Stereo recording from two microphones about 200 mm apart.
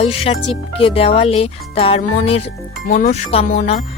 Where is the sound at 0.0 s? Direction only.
30° left (ahead or behind).